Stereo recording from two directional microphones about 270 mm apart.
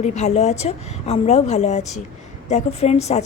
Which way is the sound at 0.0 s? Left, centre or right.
Left.